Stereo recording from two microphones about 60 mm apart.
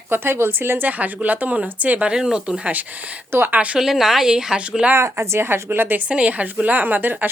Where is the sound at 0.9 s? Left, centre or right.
Right.